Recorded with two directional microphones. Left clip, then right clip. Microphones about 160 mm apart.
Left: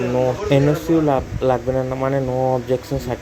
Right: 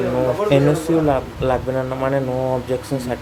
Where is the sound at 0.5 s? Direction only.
20° left (ahead or behind).